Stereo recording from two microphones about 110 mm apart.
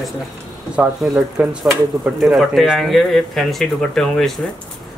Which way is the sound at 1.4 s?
10° right (ahead or behind).